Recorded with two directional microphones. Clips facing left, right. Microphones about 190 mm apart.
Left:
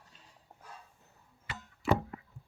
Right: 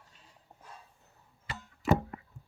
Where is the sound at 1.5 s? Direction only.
40° right (ahead or behind).